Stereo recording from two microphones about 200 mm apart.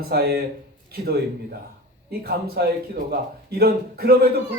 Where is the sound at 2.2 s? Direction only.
50° right (ahead or behind).